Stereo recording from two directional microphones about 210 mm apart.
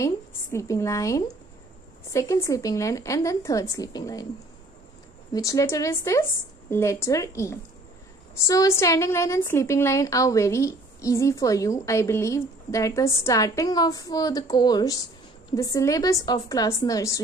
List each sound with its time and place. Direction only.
0.0 s a woman's voice: 15° left (ahead or behind)
5.3 s a woman's voice: 15° left (ahead or behind)